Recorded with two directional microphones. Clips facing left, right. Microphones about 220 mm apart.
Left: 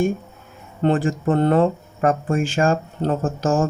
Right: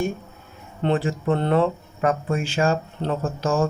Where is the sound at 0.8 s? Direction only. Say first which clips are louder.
Left 3 dB; 45° left (ahead or behind).